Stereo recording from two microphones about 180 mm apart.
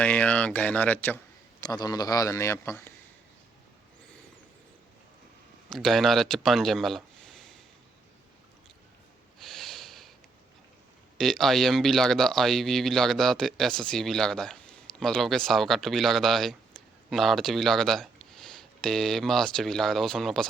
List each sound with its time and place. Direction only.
0.0 s speech: 5° left (ahead or behind)
1.6 s a man's voice: 20° left (ahead or behind)
5.6 s speech: centre (ahead or behind)
9.4 s snort: centre (ahead or behind)
11.2 s speech: centre (ahead or behind)